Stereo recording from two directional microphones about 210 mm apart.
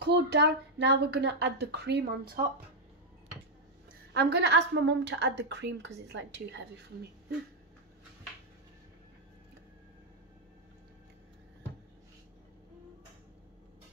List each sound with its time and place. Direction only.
0.0 s speech: 55° right (ahead or behind)
4.1 s a woman's voice: 50° right (ahead or behind)